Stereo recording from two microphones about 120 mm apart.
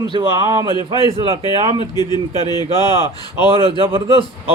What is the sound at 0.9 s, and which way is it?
Speech, 50° right (ahead or behind).